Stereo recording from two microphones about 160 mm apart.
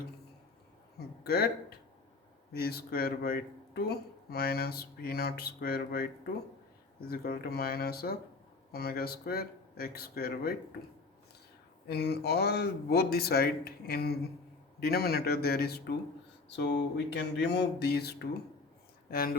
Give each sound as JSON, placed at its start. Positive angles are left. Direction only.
{"t": 0.9, "sound": "a sound", "side_deg": 80}
{"t": 2.5, "sound": "speech", "side_deg": 80}
{"t": 7.1, "sound": "speech", "side_deg": 75}
{"t": 11.9, "sound": "speech", "side_deg": 90}
{"t": 16.5, "sound": "a sound", "side_deg": 90}
{"t": 19.1, "sound": "speech", "side_deg": 65}